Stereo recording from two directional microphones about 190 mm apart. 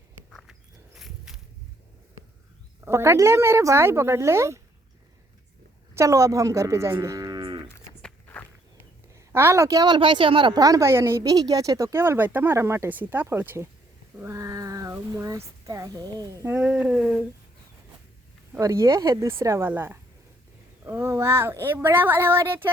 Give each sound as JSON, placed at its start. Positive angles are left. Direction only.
{"t": 0.3, "sound": "horse", "side_deg": 0}
{"t": 0.9, "sound": "walk", "side_deg": 0}
{"t": 2.8, "sound": "a woman's voice", "side_deg": -15}
{"t": 5.9, "sound": "speech", "side_deg": -15}
{"t": 7.7, "sound": "walk", "side_deg": 10}
{"t": 9.1, "sound": "a woman's voice", "side_deg": -15}
{"t": 18.5, "sound": "a woman's voice", "side_deg": -15}